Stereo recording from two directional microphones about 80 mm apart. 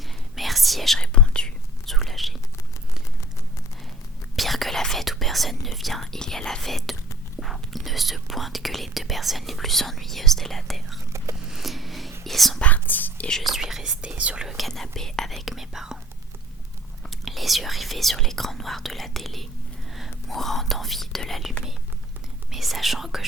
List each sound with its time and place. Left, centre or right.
0.3 s whispering: centre
4.4 s whispering: centre
11.4 s a sound: centre
12.2 s whispering: centre
12.5 s whispering: centre
13.2 s whispering: centre
14.4 s whispering: centre
17.0 s whispering: centre
22.5 s whispering: centre